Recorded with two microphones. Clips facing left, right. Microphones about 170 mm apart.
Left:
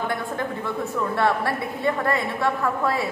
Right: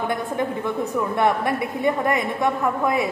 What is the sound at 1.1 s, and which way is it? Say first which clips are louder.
A woman's voice: right 2 dB; 20° right (ahead or behind).